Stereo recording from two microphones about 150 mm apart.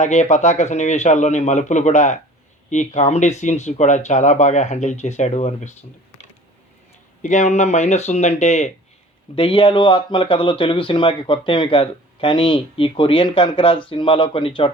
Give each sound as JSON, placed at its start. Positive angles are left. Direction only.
{"t": 0.0, "sound": "speech", "side_deg": 50}
{"t": 7.2, "sound": "speech", "side_deg": 55}
{"t": 9.3, "sound": "speech", "side_deg": 40}